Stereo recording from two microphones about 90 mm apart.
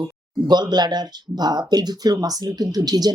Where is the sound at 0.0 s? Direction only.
55° right (ahead or behind).